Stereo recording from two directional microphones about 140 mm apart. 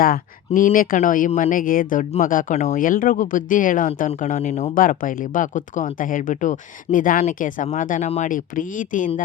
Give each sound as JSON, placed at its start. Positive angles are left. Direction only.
{"t": 0.0, "sound": "speech", "side_deg": 85}
{"t": 4.4, "sound": "speech", "side_deg": 50}
{"t": 4.7, "sound": "speech", "side_deg": 75}